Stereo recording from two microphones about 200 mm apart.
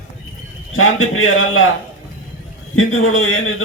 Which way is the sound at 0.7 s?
90° left.